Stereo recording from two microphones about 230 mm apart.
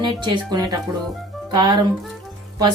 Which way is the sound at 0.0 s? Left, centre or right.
Centre.